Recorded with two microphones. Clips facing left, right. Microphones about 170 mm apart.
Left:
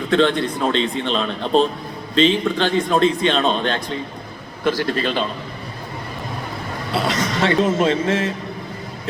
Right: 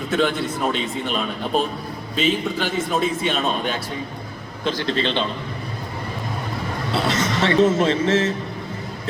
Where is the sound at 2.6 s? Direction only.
5° right (ahead or behind).